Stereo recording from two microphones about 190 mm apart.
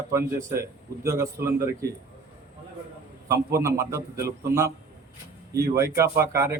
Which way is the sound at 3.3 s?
15° right (ahead or behind).